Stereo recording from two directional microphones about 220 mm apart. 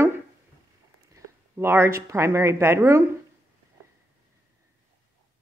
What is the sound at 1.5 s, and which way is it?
A woman's voice, 10° right (ahead or behind).